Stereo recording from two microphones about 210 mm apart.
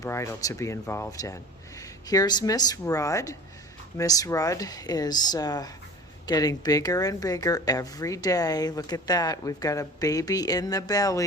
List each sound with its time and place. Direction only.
0.0 s speech: 15° left (ahead or behind)